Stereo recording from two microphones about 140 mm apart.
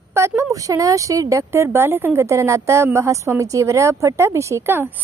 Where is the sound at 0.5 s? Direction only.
25° right (ahead or behind).